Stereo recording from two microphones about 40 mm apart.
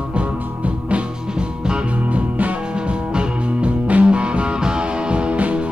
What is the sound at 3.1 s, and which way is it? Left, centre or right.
Music, right.